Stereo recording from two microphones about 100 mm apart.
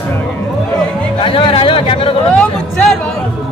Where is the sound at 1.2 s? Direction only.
60° left (ahead or behind).